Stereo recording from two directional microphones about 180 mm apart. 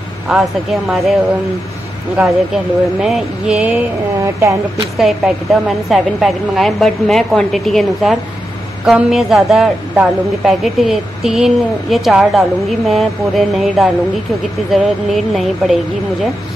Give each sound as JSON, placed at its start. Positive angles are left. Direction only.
{"t": 0.3, "sound": "a woman's voice", "side_deg": 0}
{"t": 2.1, "sound": "a woman's voice", "side_deg": -5}
{"t": 4.2, "sound": "speech", "side_deg": -15}
{"t": 4.9, "sound": "a woman's voice", "side_deg": 0}